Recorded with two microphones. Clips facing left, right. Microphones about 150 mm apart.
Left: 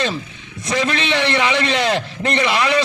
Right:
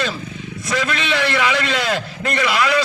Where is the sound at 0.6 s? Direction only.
20° left (ahead or behind).